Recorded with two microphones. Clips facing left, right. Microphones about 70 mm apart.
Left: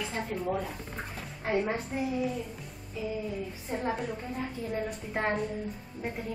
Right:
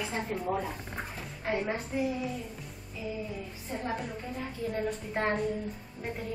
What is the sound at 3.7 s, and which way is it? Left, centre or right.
Speech, left.